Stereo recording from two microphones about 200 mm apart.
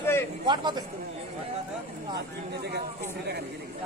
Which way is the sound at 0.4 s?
20° right (ahead or behind).